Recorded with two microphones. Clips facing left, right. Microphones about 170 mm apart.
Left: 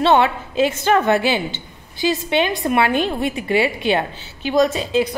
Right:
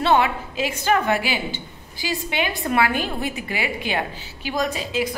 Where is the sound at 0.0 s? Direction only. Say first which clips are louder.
Left 4 dB; 25° left (ahead or behind).